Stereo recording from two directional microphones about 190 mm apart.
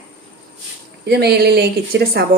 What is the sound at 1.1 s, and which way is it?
Speech, 60° right (ahead or behind).